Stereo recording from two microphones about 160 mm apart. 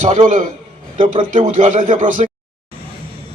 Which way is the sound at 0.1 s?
50° right (ahead or behind).